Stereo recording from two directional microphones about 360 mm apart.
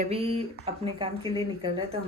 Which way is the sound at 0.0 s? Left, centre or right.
Centre.